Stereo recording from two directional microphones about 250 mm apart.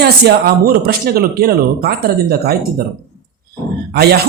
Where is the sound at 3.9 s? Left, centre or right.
Right.